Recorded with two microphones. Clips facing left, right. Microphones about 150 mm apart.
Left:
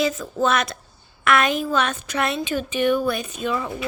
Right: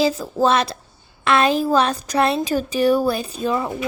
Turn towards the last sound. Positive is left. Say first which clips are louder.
# right 3 dB
turn(degrees=-35)  # may be behind; listen again after turning